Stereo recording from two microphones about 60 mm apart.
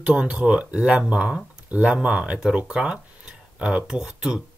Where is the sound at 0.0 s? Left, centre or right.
Centre.